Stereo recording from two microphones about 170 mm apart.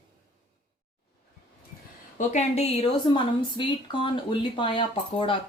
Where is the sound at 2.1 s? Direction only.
40° left (ahead or behind).